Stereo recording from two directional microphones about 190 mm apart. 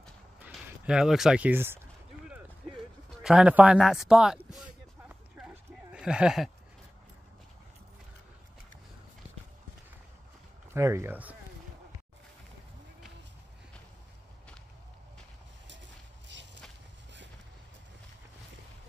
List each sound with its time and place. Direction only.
0.4 s speech: 5° right (ahead or behind)
3.3 s a sound: 5° right (ahead or behind)
10.7 s speech: 15° right (ahead or behind)